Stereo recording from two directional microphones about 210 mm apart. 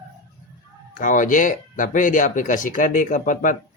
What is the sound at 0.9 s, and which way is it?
Speech, 40° left (ahead or behind).